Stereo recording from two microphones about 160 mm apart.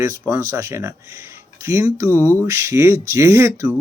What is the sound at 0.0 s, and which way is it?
Speech, 20° right (ahead or behind).